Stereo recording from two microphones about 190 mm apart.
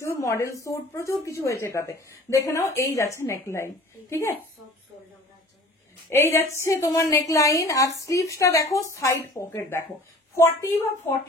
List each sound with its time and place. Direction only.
0.0 s a woman's voice: 15° left (ahead or behind)
6.3 s a woman's voice: 15° left (ahead or behind)